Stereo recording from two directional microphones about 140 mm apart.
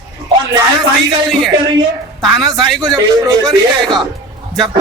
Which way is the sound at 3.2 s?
30° right (ahead or behind).